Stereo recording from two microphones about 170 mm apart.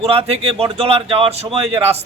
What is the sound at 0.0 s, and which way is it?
A man's voice, 35° right (ahead or behind).